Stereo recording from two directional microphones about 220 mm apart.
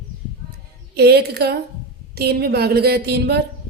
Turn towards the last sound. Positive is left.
turn(degrees=-45)  # may be behind; listen again after turning